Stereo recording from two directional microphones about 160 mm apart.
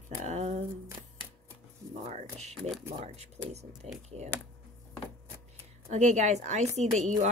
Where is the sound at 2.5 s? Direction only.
Centre (ahead or behind).